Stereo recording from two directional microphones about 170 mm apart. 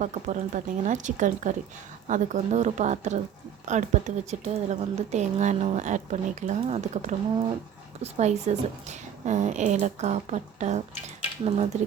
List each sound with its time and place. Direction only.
0.0 s speech: 45° right (ahead or behind)